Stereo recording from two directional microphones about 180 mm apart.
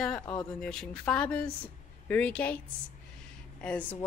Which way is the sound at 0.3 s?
5° left (ahead or behind).